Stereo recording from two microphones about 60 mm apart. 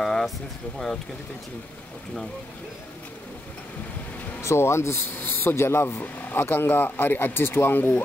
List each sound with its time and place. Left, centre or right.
0.0 s a sound: centre
4.4 s speech: left
5.2 s speech: left